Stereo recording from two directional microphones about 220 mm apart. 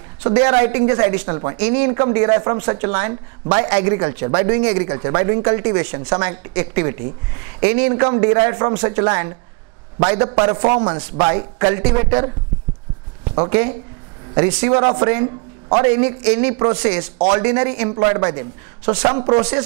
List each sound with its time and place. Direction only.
0.3 s speech: 20° right (ahead or behind)
13.2 s a sound: 25° right (ahead or behind)
14.3 s speech: 25° right (ahead or behind)